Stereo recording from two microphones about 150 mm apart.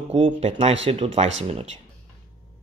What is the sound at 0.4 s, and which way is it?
Speech, 45° right (ahead or behind).